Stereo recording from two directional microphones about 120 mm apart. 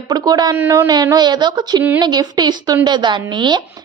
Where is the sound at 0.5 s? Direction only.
20° right (ahead or behind).